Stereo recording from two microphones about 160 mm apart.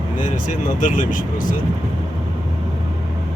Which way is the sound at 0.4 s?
50° left (ahead or behind).